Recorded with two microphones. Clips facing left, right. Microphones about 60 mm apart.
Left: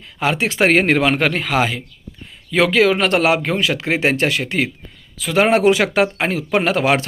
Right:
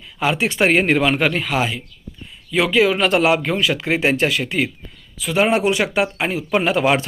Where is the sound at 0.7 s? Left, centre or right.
Left.